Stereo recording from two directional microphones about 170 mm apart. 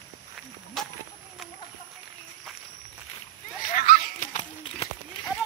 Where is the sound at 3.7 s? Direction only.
55° left (ahead or behind).